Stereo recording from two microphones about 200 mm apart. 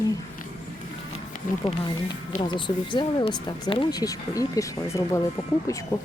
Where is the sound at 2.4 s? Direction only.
25° left (ahead or behind).